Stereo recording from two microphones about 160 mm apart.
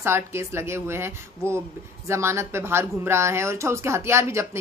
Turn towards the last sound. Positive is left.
turn(degrees=-15)  # may be behind; listen again after turning